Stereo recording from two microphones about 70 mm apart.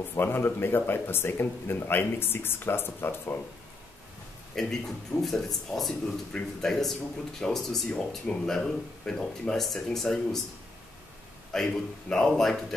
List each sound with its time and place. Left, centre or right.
0.1 s speech: left
4.6 s speech: centre
11.5 s a man's voice: centre